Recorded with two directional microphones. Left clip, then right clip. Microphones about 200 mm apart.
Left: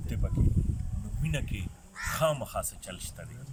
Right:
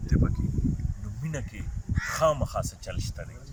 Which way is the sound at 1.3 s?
Centre (ahead or behind).